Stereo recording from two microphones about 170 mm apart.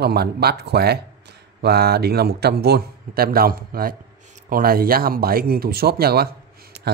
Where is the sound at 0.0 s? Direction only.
70° right (ahead or behind).